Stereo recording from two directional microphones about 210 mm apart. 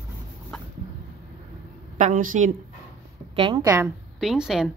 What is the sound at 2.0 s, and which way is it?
Speech, 35° right (ahead or behind).